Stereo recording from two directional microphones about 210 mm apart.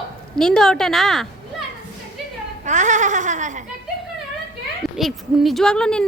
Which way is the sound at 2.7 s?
35° right (ahead or behind).